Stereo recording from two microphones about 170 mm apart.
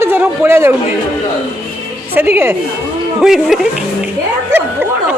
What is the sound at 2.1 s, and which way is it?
Speech, 10° right (ahead or behind).